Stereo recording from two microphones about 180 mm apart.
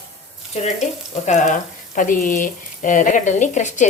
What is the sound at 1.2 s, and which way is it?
Speech, 40° left (ahead or behind).